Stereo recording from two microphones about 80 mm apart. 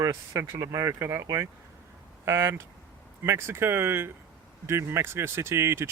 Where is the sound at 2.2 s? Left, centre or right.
Right.